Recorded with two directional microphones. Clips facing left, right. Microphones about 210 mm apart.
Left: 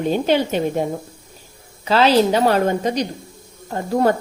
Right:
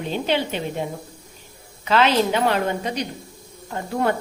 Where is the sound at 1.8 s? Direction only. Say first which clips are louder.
Left 4 dB; 35° left (ahead or behind).